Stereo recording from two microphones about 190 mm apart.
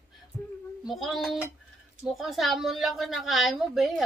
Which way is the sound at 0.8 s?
Centre (ahead or behind).